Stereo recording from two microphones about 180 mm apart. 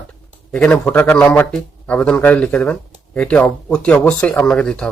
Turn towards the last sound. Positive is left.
turn(degrees=5)  # may be behind; listen again after turning